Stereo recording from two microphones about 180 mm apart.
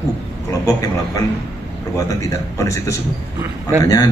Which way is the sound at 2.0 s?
20° left (ahead or behind).